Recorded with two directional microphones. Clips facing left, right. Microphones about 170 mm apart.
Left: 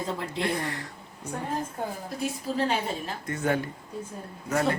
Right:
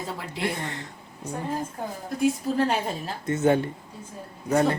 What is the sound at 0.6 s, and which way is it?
Speech, 20° right (ahead or behind).